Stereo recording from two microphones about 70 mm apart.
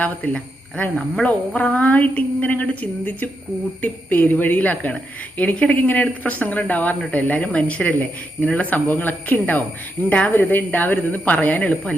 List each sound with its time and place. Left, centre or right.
0.0 s a woman's voice: left